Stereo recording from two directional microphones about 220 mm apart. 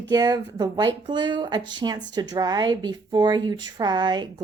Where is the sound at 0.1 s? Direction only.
15° right (ahead or behind).